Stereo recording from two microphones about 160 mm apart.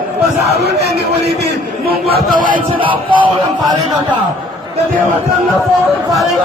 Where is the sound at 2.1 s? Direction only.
60° right (ahead or behind).